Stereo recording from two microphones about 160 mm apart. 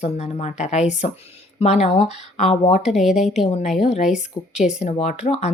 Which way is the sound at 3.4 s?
40° left (ahead or behind).